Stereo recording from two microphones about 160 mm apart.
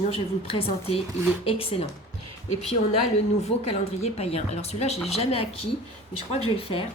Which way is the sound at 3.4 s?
40° left (ahead or behind).